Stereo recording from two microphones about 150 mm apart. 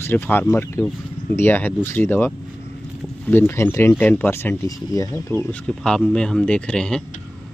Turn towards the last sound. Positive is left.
turn(degrees=5)  # may be behind; listen again after turning